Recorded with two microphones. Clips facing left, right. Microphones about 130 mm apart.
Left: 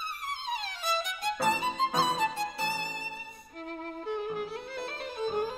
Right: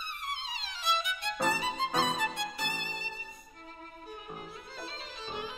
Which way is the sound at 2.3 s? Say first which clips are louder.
Left 4 dB; 35° left (ahead or behind).